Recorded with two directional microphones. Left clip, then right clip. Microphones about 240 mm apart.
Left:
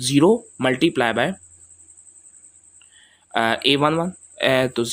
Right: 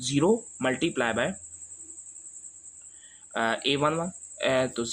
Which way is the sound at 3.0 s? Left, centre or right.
Left.